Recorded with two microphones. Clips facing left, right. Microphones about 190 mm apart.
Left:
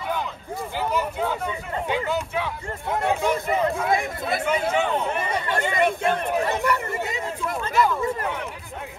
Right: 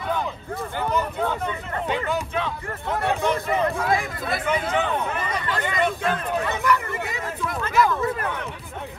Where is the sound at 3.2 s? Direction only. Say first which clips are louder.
Even; 15° left (ahead or behind).